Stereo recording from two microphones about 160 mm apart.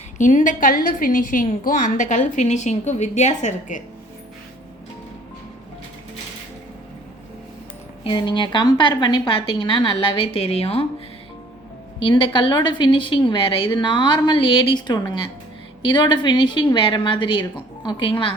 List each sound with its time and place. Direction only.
0.2 s a woman's voice: 50° left (ahead or behind)
8.0 s a woman's voice: 30° left (ahead or behind)
11.9 s a woman's voice: 30° left (ahead or behind)